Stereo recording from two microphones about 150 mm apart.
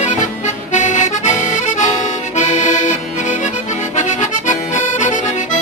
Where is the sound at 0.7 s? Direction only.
55° left (ahead or behind).